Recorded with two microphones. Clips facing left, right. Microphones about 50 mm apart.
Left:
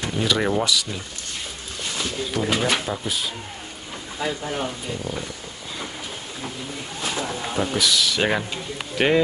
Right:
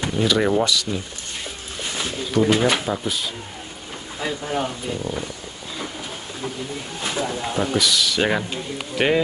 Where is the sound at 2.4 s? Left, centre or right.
Right.